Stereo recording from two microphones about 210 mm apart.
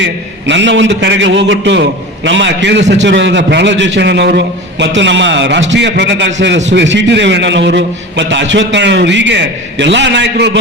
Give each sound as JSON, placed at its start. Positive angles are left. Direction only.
{"t": 0.0, "sound": "a man's voice", "side_deg": -60}